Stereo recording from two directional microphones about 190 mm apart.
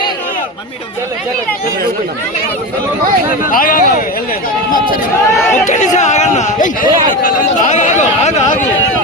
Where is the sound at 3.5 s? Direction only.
45° left (ahead or behind).